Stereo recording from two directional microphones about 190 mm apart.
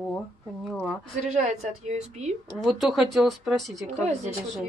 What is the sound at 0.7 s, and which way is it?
Speech, centre (ahead or behind).